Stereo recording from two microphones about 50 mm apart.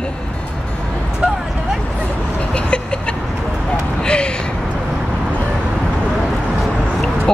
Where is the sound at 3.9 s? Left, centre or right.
Centre.